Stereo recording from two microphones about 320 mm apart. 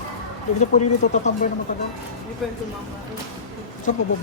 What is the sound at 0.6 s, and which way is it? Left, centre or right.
Speech, left.